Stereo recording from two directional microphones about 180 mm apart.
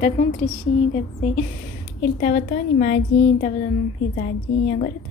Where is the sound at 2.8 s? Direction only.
50° left (ahead or behind).